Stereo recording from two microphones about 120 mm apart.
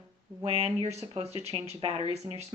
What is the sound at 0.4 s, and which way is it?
Speech, 60° right (ahead or behind).